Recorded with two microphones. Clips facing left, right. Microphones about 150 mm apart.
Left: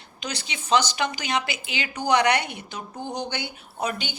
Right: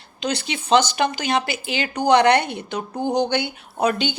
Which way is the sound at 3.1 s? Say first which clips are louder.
Right 11 dB; 80° right.